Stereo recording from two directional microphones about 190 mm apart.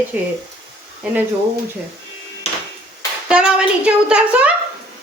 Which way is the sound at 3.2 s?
5° right (ahead or behind).